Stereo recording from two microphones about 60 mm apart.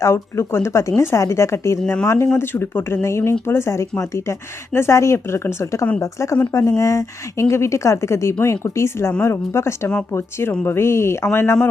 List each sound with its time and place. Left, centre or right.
0.0 s a woman's voice: left
2.4 s a woman's voice: left
6.0 s a woman's voice: left